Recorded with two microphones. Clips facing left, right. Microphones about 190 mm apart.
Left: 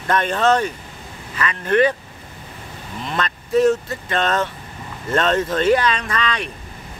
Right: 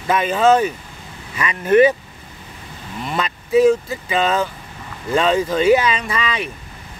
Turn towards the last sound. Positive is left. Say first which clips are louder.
# right 1 dB
turn(degrees=-5)  # may be behind; listen again after turning